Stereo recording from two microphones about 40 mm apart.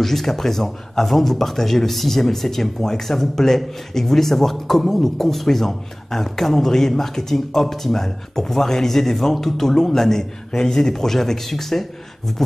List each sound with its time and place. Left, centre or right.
0.0 s speech: centre